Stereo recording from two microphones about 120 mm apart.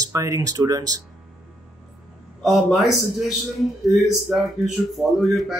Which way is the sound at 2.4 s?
Centre (ahead or behind).